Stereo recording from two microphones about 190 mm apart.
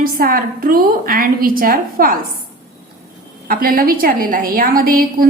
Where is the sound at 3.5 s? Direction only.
50° right (ahead or behind).